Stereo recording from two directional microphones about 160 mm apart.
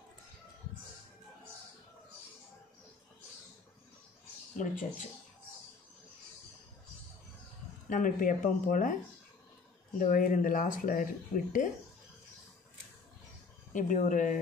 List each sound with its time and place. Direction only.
4.6 s speech: 50° left (ahead or behind)
7.9 s speech: 55° left (ahead or behind)
9.9 s speech: 55° left (ahead or behind)
13.7 s speech: 55° left (ahead or behind)